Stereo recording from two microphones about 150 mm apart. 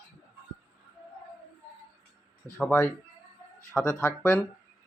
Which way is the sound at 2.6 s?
15° left (ahead or behind).